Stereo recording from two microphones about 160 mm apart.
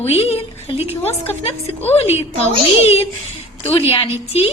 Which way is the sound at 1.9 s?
40° left (ahead or behind).